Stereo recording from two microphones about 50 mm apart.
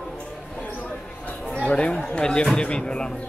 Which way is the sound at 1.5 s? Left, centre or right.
Left.